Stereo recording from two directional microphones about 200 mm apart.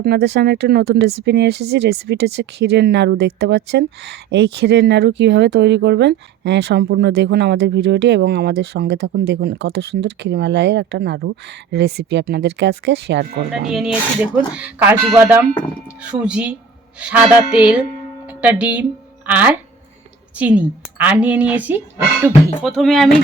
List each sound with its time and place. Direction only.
0.0 s speech: 55° right (ahead or behind)
13.5 s a woman's voice: centre (ahead or behind)